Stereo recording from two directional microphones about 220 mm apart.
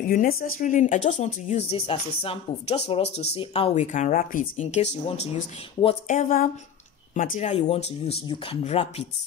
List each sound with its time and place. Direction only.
0.0 s speech: 40° left (ahead or behind)